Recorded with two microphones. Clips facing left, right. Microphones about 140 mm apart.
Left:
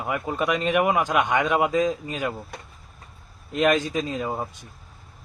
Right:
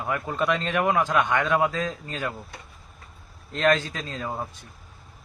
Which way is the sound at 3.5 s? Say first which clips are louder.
Left 2 dB; 10° left (ahead or behind).